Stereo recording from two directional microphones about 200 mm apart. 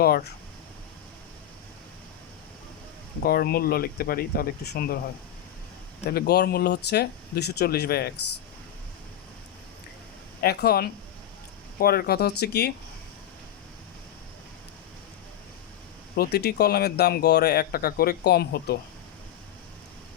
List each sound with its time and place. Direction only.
3.2 s speech: 50° left (ahead or behind)
6.1 s speech: 50° left (ahead or behind)
10.4 s speech: 50° left (ahead or behind)
16.1 s speech: 50° left (ahead or behind)